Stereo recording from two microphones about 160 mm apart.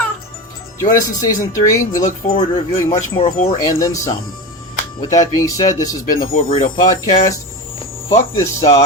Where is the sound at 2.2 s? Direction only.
60° left (ahead or behind).